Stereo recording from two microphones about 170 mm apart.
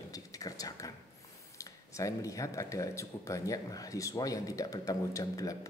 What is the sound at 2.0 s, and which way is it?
Speech, 20° left (ahead or behind).